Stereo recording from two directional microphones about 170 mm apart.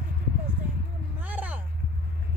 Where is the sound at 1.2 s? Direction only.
10° right (ahead or behind).